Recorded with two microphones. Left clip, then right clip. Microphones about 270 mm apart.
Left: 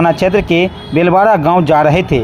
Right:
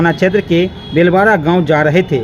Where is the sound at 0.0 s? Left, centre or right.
Centre.